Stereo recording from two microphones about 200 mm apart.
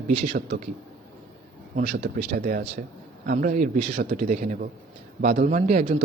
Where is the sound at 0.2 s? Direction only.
35° right (ahead or behind).